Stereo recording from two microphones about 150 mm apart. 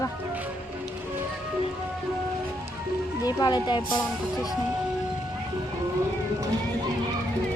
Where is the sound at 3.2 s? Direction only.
25° left (ahead or behind).